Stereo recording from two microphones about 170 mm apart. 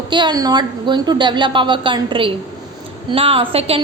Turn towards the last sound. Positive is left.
turn(degrees=-35)  # may be behind; listen again after turning